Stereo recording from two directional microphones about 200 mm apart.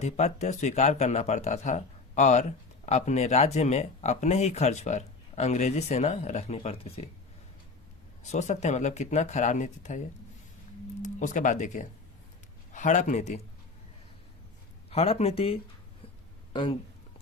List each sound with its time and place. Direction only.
0.0 s speech: 35° left (ahead or behind)
8.2 s speech: 35° left (ahead or behind)
14.8 s speech: 30° left (ahead or behind)